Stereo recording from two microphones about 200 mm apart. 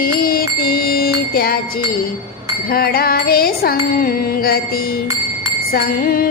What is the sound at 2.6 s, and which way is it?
Music, 50° left (ahead or behind).